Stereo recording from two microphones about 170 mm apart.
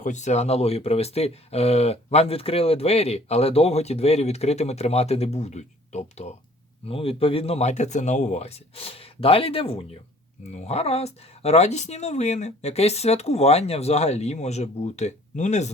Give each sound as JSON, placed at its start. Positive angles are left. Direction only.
{"t": 0.0, "sound": "speech", "side_deg": 45}